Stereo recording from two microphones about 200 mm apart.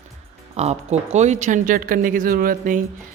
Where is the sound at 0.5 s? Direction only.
30° right (ahead or behind).